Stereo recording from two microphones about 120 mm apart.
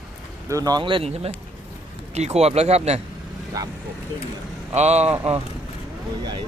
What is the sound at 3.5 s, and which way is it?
Speech, 30° right (ahead or behind).